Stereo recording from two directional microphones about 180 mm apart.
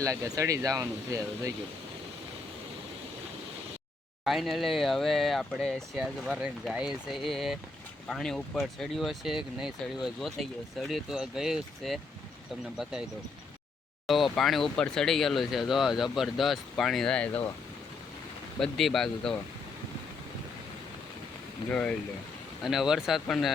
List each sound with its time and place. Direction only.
0.0 s speech: 15° right (ahead or behind)
4.2 s speech: centre (ahead or behind)
14.1 s speech: centre (ahead or behind)
18.6 s speech: centre (ahead or behind)
21.7 s speech: 5° left (ahead or behind)